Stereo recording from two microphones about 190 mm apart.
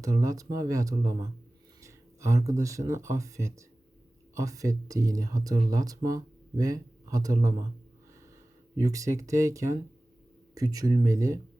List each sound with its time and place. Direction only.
0.0 s speech: 15° right (ahead or behind)
8.7 s speech: 15° right (ahead or behind)